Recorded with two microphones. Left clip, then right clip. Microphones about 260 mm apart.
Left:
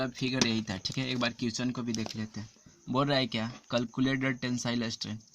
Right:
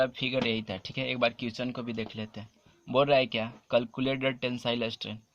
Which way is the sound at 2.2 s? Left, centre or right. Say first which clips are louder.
Right 1 dB; centre.